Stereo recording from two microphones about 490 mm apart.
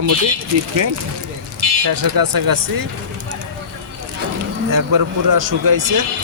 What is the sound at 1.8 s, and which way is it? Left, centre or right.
Speech, right.